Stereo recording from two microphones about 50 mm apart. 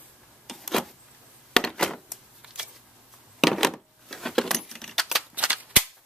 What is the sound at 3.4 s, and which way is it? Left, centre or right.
Keys jangling, centre.